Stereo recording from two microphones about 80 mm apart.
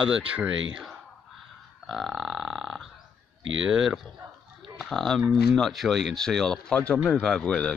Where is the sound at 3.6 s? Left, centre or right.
Centre.